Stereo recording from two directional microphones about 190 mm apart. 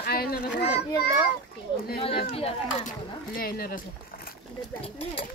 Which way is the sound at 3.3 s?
50° left (ahead or behind).